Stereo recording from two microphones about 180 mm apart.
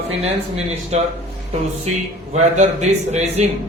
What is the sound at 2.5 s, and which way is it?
Speech, 40° right (ahead or behind).